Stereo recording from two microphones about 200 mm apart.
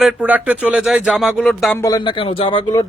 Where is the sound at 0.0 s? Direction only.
5° right (ahead or behind).